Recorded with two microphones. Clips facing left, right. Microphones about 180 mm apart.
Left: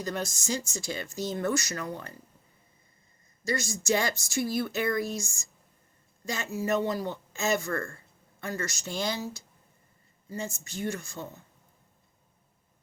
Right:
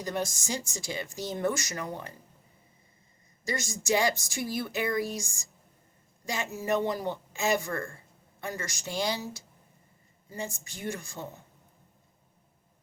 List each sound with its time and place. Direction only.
0.0 s speech: 15° right (ahead or behind)
3.4 s speech: 15° right (ahead or behind)